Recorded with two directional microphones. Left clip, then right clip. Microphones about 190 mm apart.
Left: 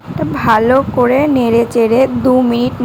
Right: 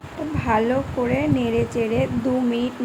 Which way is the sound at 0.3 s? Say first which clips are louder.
Left 10 dB; 25° left (ahead or behind).